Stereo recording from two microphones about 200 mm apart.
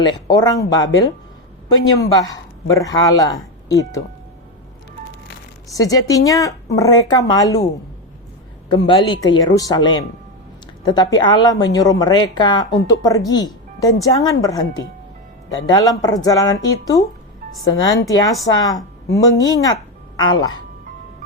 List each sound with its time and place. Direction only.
0.0 s a woman's voice: 20° left (ahead or behind)
5.7 s speech: 15° left (ahead or behind)
8.7 s a woman's voice: 20° left (ahead or behind)
18.1 s a woman's voice: 15° left (ahead or behind)